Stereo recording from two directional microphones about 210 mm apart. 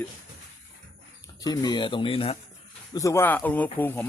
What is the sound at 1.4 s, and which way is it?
Speech, 20° left (ahead or behind).